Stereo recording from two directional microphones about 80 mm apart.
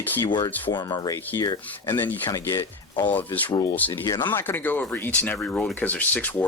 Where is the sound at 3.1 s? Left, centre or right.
Left.